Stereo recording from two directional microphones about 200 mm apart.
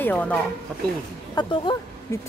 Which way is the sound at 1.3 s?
20° left (ahead or behind).